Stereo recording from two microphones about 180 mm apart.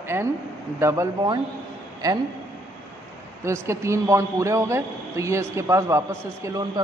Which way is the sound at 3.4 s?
15° right (ahead or behind).